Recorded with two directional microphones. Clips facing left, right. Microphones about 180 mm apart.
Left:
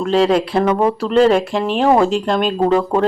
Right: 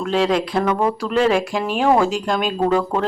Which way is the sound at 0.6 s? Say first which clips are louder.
Left 4 dB; 25° left (ahead or behind).